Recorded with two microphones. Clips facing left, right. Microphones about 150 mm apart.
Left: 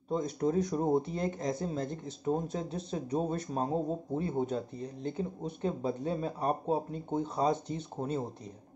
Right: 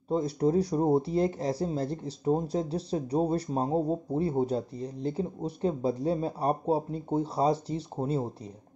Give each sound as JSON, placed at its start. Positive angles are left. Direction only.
{"t": 0.1, "sound": "speech", "side_deg": -35}